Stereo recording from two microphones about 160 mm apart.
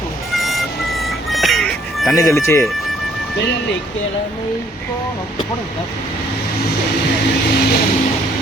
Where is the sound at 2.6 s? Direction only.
Centre (ahead or behind).